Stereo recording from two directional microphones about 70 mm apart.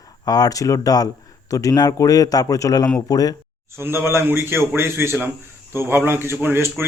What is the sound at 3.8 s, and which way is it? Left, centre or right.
A man's voice, right.